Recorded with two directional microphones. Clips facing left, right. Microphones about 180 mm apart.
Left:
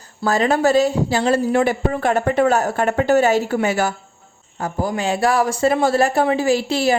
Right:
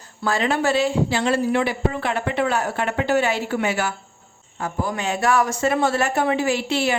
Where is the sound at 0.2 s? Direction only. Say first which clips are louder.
Left 5 dB; 40° left (ahead or behind).